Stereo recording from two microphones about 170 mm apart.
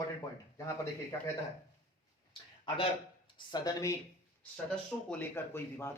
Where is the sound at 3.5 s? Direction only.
20° left (ahead or behind).